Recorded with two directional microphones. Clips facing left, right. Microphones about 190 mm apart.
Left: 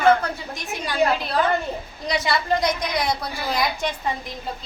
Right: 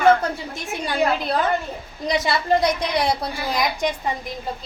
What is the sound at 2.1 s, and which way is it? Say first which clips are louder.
A woman's voice: right 2 dB; 25° right (ahead or behind).